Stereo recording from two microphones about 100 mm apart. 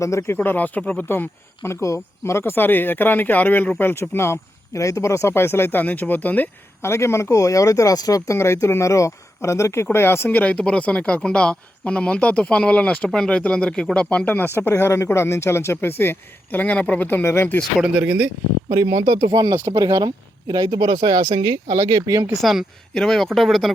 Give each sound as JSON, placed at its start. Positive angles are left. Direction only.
{"t": 0.0, "sound": "speech", "side_deg": 30}
{"t": 0.3, "sound": "speech", "side_deg": 15}
{"t": 17.6, "sound": "speech", "side_deg": -5}
{"t": 18.7, "sound": "speech", "side_deg": -35}
{"t": 22.4, "sound": "speech", "side_deg": -5}